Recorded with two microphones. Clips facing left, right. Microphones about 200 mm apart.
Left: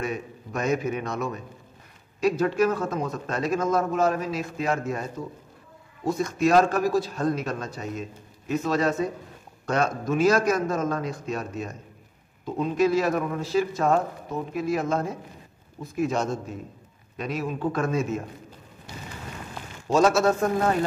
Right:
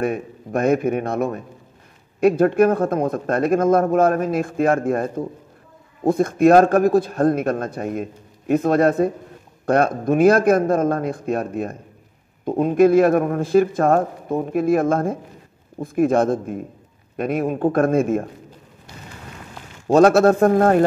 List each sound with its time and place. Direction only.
0.0 s a man's voice: 55° right (ahead or behind)
19.9 s a man's voice: 55° right (ahead or behind)